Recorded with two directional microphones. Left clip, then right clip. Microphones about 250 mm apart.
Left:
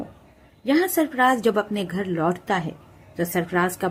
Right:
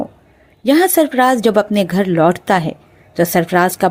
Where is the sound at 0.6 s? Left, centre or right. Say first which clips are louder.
Right 9 dB; right.